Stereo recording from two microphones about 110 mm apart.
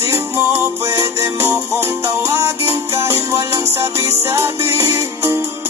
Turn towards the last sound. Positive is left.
turn(degrees=-25)  # may be behind; listen again after turning